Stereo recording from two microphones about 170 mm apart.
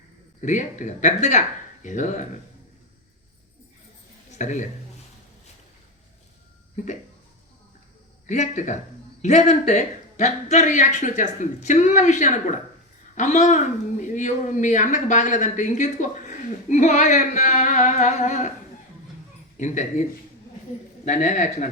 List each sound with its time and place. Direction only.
0.4 s speech: 45° left (ahead or behind)
4.4 s speech: 45° left (ahead or behind)
8.3 s speech: 45° left (ahead or behind)
19.5 s speech: 45° left (ahead or behind)